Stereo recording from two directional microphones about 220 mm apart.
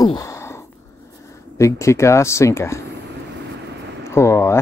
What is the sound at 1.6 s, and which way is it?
Speech, 15° left (ahead or behind).